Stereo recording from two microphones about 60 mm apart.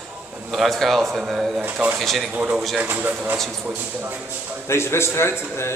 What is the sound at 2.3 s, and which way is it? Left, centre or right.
Speech, right.